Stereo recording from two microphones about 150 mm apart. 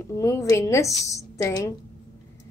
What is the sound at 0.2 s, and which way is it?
A woman's voice, 20° left (ahead or behind).